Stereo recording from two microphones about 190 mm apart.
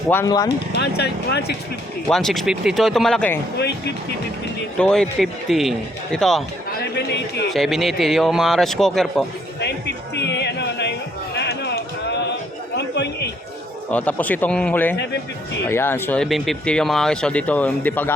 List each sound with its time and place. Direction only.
0.1 s speech: 15° left (ahead or behind)
0.4 s speech: 60° left (ahead or behind)
2.0 s speech: centre (ahead or behind)
4.8 s speech: 5° left (ahead or behind)
6.9 s speech: 60° left (ahead or behind)
7.5 s speech: centre (ahead or behind)
9.6 s music: 65° left (ahead or behind)
11.3 s a sound: 60° left (ahead or behind)
12.7 s chatter: 65° left (ahead or behind)
13.9 s speech: 10° left (ahead or behind)